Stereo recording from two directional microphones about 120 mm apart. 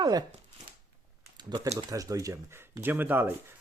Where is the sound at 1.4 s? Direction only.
35° right (ahead or behind).